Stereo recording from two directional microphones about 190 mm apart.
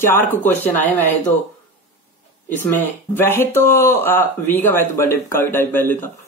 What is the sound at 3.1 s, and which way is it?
Speech, 10° left (ahead or behind).